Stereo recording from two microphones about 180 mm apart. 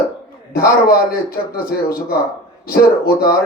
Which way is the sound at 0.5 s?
55° left (ahead or behind).